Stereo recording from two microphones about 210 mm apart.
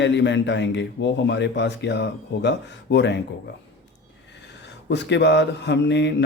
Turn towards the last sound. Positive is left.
turn(degrees=55)  # may be behind; listen again after turning